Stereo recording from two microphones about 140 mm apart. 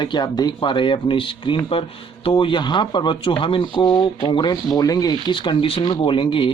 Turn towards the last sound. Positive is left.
turn(degrees=40)  # may be behind; listen again after turning